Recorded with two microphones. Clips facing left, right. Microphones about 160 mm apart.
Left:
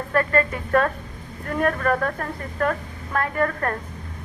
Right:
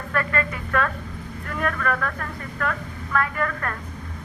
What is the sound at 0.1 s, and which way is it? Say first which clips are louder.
A woman's voice: left 4 dB; 40° left (ahead or behind).